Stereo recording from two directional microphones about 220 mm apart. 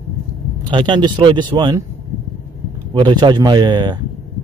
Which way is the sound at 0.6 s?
20° right (ahead or behind).